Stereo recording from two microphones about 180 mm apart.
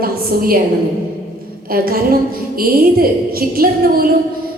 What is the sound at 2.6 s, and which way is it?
A woman's voice, 55° right (ahead or behind).